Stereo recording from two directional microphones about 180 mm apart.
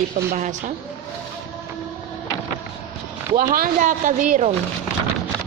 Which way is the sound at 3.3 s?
50° right (ahead or behind).